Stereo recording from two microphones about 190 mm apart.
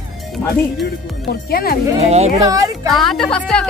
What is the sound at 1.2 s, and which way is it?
Speech, 55° left (ahead or behind).